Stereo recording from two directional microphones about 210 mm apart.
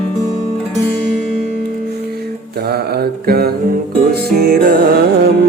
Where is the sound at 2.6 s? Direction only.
50° right (ahead or behind).